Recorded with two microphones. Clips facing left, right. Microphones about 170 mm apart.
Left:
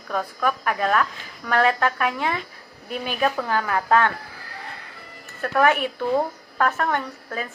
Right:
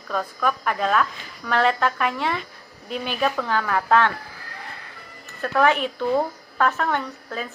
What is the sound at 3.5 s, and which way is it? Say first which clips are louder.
Speech: right 1 dB; 35° left (ahead or behind).